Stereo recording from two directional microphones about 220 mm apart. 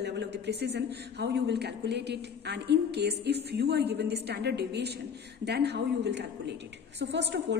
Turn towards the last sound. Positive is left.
turn(degrees=-50)  # may be behind; listen again after turning